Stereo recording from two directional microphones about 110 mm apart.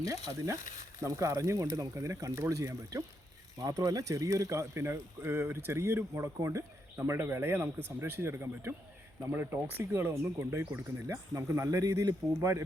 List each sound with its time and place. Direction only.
0.3 s speech: 30° right (ahead or behind)